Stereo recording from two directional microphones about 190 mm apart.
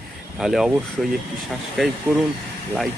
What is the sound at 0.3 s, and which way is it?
Speech, centre (ahead or behind).